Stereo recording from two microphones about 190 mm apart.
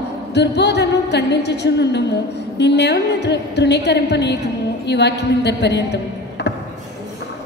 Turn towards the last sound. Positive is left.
turn(degrees=65)  # may be behind; listen again after turning